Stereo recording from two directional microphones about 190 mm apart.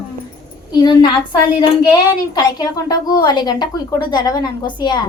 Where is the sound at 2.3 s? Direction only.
20° left (ahead or behind).